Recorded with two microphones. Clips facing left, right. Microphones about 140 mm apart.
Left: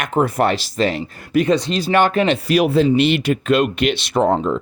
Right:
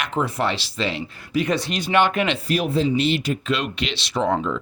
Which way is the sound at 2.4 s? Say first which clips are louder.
Left 6 dB; 75° left (ahead or behind).